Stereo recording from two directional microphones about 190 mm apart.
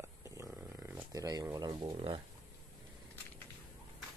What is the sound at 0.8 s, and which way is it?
Speech, 15° right (ahead or behind).